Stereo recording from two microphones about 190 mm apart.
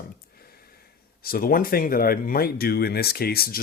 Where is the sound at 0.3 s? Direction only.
55° left (ahead or behind).